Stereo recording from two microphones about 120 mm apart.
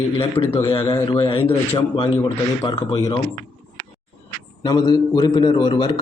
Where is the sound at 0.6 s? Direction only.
25° left (ahead or behind).